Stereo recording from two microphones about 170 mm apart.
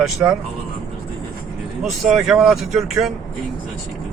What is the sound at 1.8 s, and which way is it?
Speech, centre (ahead or behind).